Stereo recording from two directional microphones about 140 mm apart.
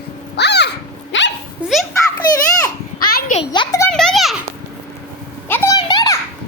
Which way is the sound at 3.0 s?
90° left.